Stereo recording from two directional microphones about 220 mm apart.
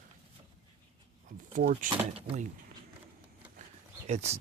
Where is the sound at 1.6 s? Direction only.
35° right (ahead or behind).